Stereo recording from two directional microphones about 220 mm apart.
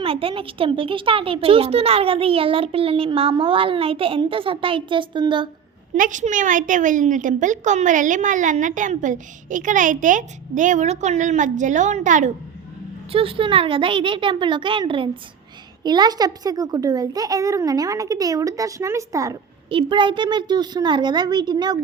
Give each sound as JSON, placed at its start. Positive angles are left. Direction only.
{"t": 0.0, "sound": "speech", "side_deg": -25}
{"t": 5.9, "sound": "a woman's voice", "side_deg": -35}